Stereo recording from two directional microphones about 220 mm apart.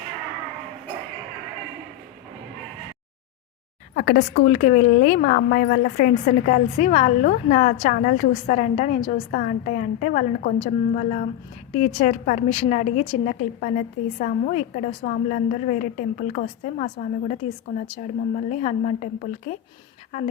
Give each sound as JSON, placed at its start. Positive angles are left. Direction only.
{"t": 3.9, "sound": "a woman's voice", "side_deg": 45}
{"t": 4.4, "sound": "a woman's voice", "side_deg": 35}
{"t": 17.8, "sound": "a woman's voice", "side_deg": 25}